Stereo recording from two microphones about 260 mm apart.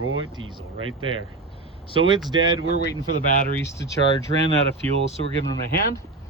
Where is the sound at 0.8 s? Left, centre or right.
Centre.